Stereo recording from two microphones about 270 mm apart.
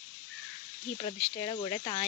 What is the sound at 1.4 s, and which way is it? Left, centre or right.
Speech, centre.